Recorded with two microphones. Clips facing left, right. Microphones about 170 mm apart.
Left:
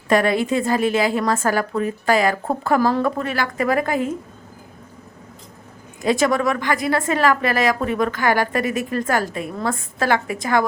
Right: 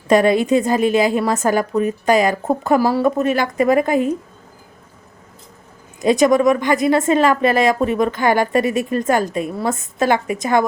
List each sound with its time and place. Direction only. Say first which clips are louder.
0.1 s speech: right 4 dB; 20° right (ahead or behind)
6.0 s speech: right 5 dB; 20° right (ahead or behind)